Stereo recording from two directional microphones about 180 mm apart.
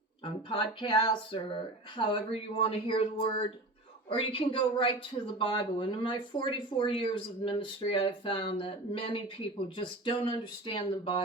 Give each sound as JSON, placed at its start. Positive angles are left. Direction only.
{"t": 0.5, "sound": "speech", "side_deg": 30}